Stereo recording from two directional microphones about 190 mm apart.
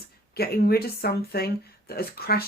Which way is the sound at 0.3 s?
55° left (ahead or behind).